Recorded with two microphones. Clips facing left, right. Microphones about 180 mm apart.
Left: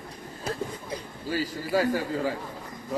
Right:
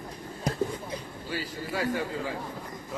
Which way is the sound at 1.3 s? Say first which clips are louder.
Left 7 dB; 40° left (ahead or behind).